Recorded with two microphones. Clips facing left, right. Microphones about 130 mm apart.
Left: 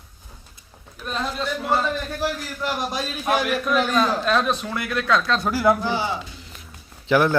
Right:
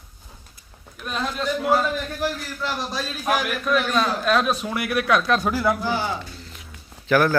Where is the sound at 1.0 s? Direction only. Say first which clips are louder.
Even; centre (ahead or behind).